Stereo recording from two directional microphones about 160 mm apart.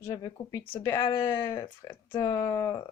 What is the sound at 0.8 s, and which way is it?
Speech, 15° left (ahead or behind).